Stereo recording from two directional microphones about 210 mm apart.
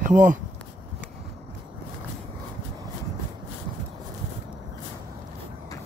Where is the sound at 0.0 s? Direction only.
40° right (ahead or behind).